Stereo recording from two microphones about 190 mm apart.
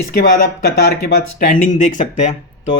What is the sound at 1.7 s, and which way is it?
Speech, 40° left (ahead or behind).